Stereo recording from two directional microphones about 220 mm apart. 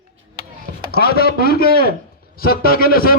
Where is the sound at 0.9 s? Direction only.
45° left (ahead or behind).